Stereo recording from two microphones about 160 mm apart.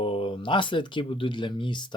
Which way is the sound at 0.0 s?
35° left (ahead or behind).